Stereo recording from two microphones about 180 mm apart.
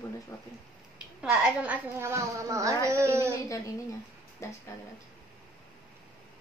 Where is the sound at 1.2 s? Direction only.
5° right (ahead or behind).